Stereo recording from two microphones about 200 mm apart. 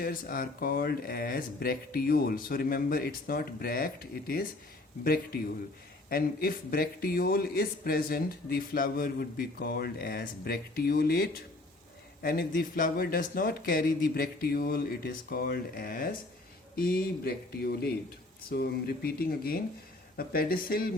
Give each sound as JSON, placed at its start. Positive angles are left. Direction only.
{"t": 0.0, "sound": "speech", "side_deg": 45}